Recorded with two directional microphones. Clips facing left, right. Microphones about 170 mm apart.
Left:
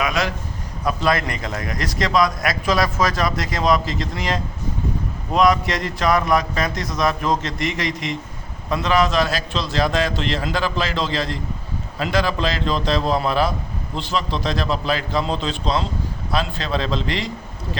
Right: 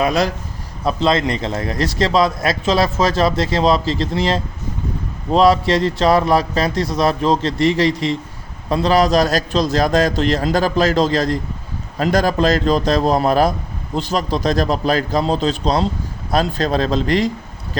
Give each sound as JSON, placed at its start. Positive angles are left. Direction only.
{"t": 0.0, "sound": "a man's voice", "side_deg": -35}
{"t": 0.9, "sound": "a man's voice", "side_deg": -25}